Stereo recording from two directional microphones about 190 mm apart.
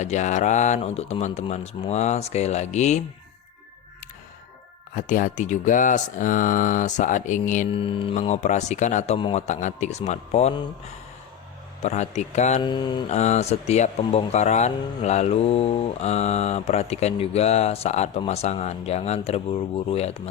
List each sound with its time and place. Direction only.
0.0 s speech: 40° left (ahead or behind)
4.9 s speech: 45° left (ahead or behind)
7.7 s speech: 30° left (ahead or behind)
11.8 s speech: 35° left (ahead or behind)
12.6 s mantra: 25° left (ahead or behind)
13.1 s speech: 35° left (ahead or behind)